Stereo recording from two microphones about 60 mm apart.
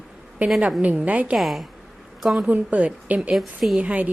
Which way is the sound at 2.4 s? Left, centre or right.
Right.